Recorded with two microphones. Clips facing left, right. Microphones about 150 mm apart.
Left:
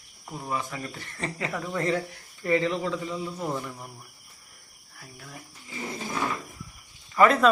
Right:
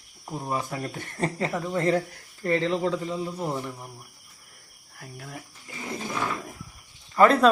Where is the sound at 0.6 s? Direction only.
40° right (ahead or behind).